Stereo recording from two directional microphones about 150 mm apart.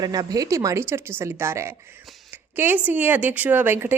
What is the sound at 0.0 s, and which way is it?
Speech, 25° right (ahead or behind).